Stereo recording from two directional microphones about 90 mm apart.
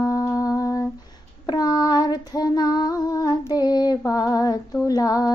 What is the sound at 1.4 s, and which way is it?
Female singing, 45° left (ahead or behind).